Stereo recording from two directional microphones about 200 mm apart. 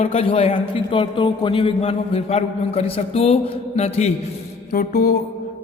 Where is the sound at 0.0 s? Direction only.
30° left (ahead or behind).